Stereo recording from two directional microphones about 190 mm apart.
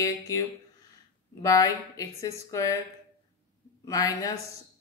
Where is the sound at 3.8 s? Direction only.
20° left (ahead or behind).